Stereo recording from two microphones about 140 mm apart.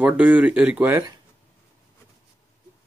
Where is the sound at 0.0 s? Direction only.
10° right (ahead or behind).